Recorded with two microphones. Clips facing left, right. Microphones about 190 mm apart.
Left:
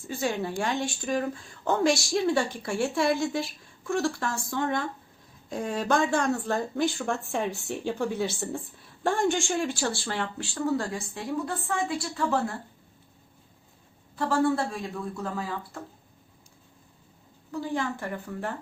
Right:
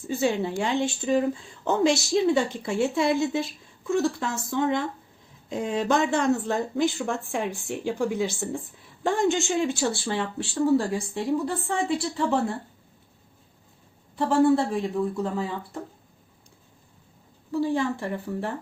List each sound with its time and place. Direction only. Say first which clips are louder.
0.1 s speech: right 4 dB; 25° right (ahead or behind)
14.2 s speech: right 5 dB; 25° right (ahead or behind)
17.5 s speech: right 5 dB; 30° right (ahead or behind)